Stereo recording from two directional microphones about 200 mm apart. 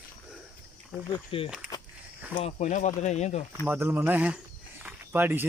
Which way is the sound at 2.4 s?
35° left (ahead or behind).